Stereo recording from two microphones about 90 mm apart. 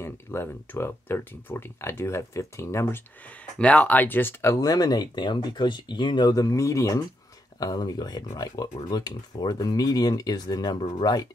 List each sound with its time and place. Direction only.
0.0 s speech: 25° left (ahead or behind)
3.3 s speech: 15° left (ahead or behind)
4.6 s speech: 45° left (ahead or behind)